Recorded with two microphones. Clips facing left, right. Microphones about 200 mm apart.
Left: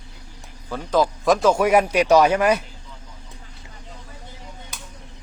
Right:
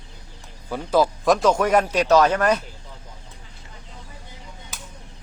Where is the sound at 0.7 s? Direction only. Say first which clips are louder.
Right 1 dB; 10° right (ahead or behind); by 2.6 s 10° left (ahead or behind).